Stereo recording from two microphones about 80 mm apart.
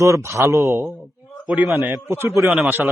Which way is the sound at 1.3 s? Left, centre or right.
Centre.